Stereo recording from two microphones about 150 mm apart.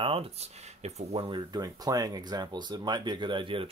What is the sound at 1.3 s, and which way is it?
Speech, 25° right (ahead or behind).